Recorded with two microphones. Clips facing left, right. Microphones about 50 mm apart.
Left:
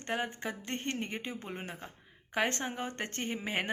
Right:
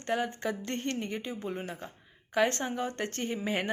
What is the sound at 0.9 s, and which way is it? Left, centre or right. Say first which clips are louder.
A woman's voice: right 3 dB; left.